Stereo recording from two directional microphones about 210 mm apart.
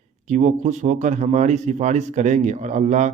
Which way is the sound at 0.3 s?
35° right (ahead or behind).